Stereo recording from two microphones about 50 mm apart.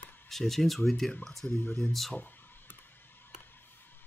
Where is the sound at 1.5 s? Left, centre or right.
Left.